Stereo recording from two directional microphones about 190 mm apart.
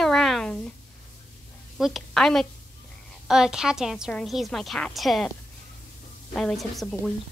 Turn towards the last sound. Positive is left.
turn(degrees=0)  # may be behind; listen again after turning